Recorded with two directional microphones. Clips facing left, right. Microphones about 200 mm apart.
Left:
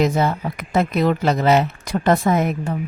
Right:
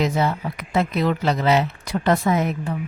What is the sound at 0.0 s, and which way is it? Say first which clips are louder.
Speech: left 3 dB; 45° left (ahead or behind).